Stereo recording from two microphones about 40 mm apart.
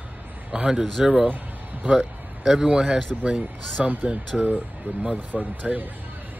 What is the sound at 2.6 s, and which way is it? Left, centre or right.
Speech, right.